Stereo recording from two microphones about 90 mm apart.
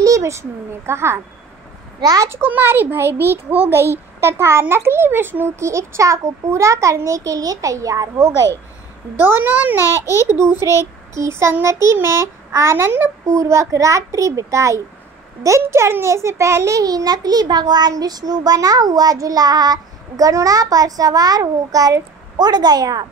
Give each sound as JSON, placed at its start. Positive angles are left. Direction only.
{"t": 0.0, "sound": "a child's voice", "side_deg": -35}
{"t": 9.2, "sound": "a child's voice", "side_deg": -20}
{"t": 9.8, "sound": "a child's voice", "side_deg": 35}
{"t": 10.6, "sound": "a child's voice", "side_deg": -35}